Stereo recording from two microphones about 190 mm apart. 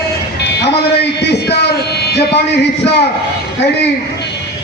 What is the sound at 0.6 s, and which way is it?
A man's voice, 60° left (ahead or behind).